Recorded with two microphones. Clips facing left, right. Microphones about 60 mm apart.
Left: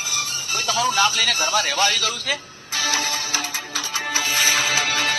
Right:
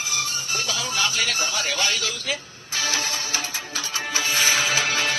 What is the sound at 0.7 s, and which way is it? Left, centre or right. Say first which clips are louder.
Speech: left 9 dB; left.